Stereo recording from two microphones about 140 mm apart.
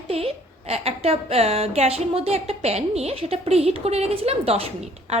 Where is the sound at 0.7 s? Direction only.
45° right (ahead or behind).